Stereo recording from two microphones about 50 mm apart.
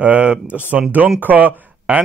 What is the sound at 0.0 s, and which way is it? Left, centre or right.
Speech, right.